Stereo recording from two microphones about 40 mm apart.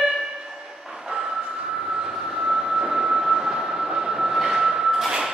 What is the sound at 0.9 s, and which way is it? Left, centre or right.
Train, centre.